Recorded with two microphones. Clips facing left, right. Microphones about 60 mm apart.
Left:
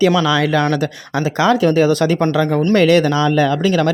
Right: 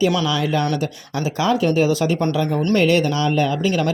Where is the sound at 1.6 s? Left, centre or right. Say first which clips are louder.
Left 4 dB; left.